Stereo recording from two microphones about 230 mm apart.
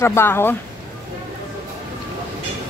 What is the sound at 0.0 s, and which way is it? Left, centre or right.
Speech, centre.